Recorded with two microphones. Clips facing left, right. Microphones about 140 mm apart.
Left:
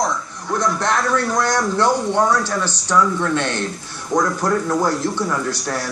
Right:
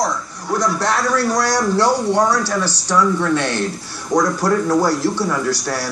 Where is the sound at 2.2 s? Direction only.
35° right (ahead or behind).